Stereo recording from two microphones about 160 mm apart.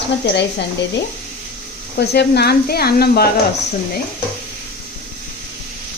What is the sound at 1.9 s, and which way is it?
Speech, 90° left.